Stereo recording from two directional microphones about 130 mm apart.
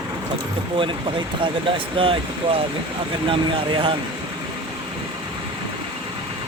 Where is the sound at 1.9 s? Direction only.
45° right (ahead or behind).